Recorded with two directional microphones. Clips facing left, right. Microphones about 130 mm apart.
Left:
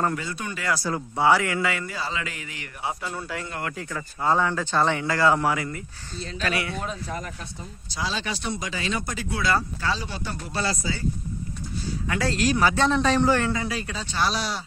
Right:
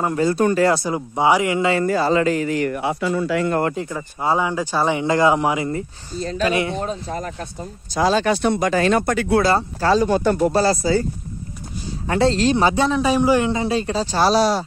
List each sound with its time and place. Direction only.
0.1 s speech: 40° right (ahead or behind)
0.7 s speech: 20° right (ahead or behind)
1.8 s speech: 50° right (ahead or behind)
2.7 s speech: 75° right (ahead or behind)
3.9 s speech: 15° right (ahead or behind)
5.7 s speech: 35° right (ahead or behind)
6.4 s speech: 25° right (ahead or behind)
6.8 s speech: 35° right (ahead or behind); by 9.4 s 60° right (ahead or behind)
9.4 s speech: 35° right (ahead or behind)
9.8 s speech: 50° right (ahead or behind)
10.5 s speech: 40° right (ahead or behind)
12.1 s speech: 30° right (ahead or behind)
12.8 s speech: 5° right (ahead or behind)
13.5 s speech: 25° right (ahead or behind)